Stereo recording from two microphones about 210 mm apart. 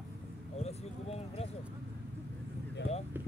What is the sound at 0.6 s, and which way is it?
Speech, 30° left (ahead or behind).